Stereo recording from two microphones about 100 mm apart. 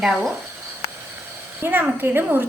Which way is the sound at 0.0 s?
Centre (ahead or behind).